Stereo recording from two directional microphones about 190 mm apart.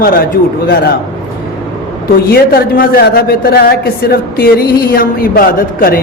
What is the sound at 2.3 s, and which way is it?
A man's voice, 50° left (ahead or behind).